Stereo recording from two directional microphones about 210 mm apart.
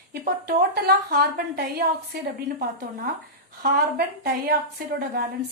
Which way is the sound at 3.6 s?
45° right (ahead or behind).